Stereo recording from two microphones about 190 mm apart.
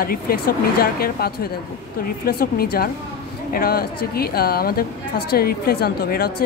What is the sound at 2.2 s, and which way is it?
A woman's voice, 50° left (ahead or behind).